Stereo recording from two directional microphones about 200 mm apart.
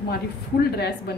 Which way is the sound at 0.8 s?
55° left (ahead or behind).